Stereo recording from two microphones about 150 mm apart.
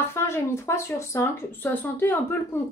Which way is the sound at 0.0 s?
15° left (ahead or behind).